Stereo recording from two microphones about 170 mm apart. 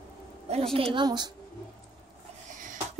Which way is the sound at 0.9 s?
25° right (ahead or behind).